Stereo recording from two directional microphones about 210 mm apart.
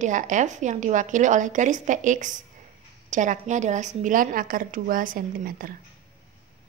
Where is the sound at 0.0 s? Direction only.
35° right (ahead or behind).